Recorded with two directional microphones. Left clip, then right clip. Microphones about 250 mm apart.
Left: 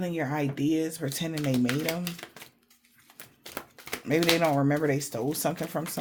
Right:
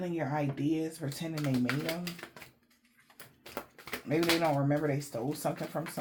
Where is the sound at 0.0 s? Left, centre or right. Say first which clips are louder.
Left 4 dB; left.